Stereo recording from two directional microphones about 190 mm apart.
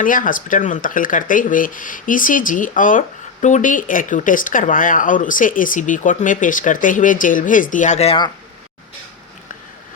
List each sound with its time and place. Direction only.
0.0 s speech: 45° left (ahead or behind); by 8.3 s 30° left (ahead or behind)